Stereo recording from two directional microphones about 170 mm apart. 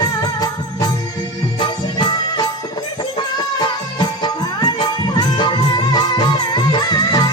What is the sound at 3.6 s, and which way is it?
Music, 25° left (ahead or behind).